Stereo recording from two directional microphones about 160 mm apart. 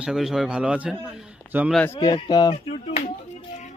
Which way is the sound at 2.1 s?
25° left (ahead or behind).